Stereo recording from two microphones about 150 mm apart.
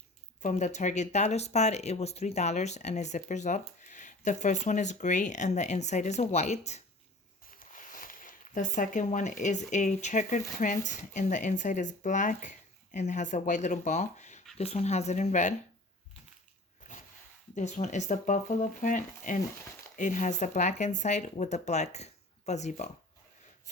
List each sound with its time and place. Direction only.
0.4 s speech: 50° left (ahead or behind)
7.6 s speech: 60° left (ahead or behind)
17.5 s speech: 50° left (ahead or behind)